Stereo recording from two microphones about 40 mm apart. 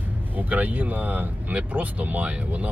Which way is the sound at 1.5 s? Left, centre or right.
Right.